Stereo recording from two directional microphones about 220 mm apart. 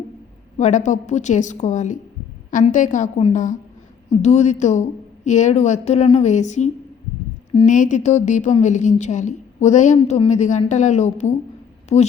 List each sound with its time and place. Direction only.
0.5 s a woman's voice: 35° left (ahead or behind)